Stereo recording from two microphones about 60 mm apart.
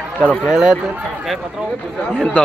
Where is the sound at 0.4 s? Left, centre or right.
Centre.